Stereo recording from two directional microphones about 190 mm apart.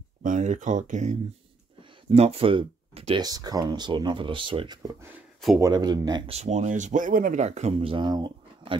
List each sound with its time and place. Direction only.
0.2 s speech: 45° right (ahead or behind); by 8.7 s 25° right (ahead or behind)